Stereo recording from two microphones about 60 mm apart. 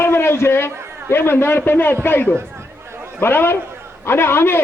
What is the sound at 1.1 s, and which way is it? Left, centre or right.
A man's voice, left.